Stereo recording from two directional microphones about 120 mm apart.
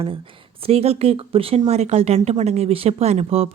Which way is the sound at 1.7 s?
65° right (ahead or behind).